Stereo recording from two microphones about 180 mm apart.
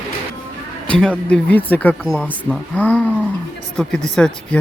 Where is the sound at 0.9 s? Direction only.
5° left (ahead or behind).